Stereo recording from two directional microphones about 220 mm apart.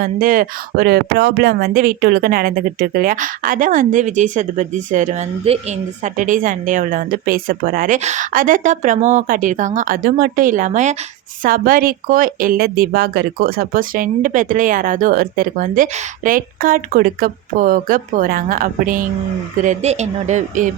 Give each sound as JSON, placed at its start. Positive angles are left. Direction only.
{"t": 0.0, "sound": "a woman's voice", "side_deg": -40}